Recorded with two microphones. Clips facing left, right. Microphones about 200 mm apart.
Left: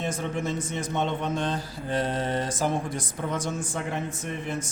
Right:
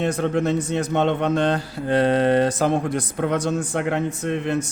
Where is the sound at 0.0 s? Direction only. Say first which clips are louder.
Right 8 dB; 65° right (ahead or behind).